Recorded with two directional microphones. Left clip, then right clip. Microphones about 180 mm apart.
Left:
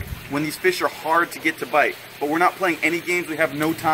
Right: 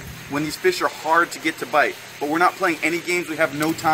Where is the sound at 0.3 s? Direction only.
10° left (ahead or behind).